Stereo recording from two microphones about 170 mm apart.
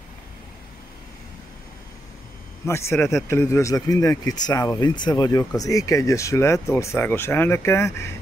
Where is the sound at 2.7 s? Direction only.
15° left (ahead or behind).